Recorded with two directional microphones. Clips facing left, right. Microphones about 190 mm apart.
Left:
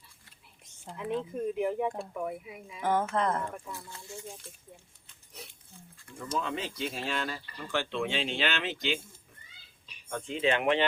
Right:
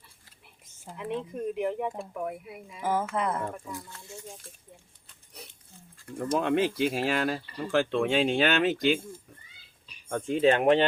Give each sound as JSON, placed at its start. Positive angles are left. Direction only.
{"t": 0.7, "sound": "speech", "side_deg": 0}
{"t": 6.1, "sound": "speech", "side_deg": -55}
{"t": 7.5, "sound": "speech", "side_deg": -30}
{"t": 7.9, "sound": "speech", "side_deg": -50}
{"t": 10.1, "sound": "speech", "side_deg": -45}